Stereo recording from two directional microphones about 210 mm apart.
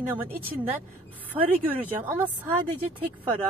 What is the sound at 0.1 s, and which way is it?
Speech, 10° right (ahead or behind).